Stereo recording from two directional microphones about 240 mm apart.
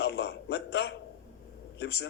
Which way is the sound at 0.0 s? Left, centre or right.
Left.